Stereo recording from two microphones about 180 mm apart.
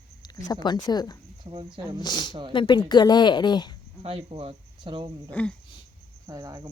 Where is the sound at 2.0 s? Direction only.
25° left (ahead or behind).